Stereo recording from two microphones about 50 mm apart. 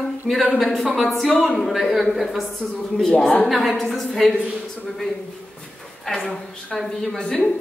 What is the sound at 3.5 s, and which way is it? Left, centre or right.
Speech, centre.